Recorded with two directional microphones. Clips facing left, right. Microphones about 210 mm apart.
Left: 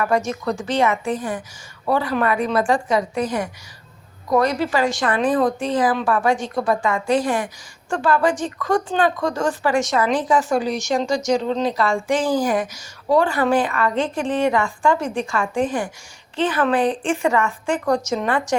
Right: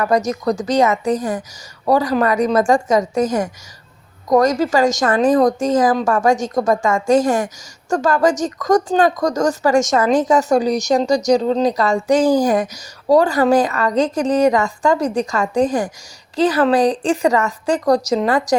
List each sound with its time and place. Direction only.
0.0 s a woman's voice: 40° right (ahead or behind)